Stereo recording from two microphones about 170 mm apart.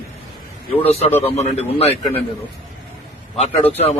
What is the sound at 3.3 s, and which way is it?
Speech, 40° left (ahead or behind).